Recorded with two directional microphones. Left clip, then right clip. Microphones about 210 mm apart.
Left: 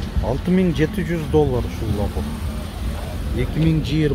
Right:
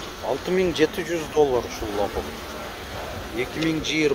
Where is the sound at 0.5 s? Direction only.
Centre (ahead or behind).